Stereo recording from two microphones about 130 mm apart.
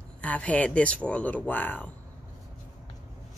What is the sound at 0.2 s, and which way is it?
Speech, 10° left (ahead or behind).